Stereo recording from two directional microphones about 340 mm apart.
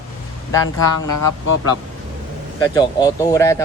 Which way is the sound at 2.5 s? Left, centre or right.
Centre.